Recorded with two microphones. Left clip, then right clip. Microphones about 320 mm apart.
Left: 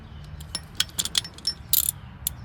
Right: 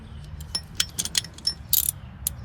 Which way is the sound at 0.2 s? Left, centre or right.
Centre.